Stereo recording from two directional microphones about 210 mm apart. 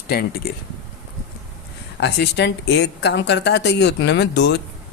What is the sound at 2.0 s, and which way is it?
A man's voice, 55° left (ahead or behind).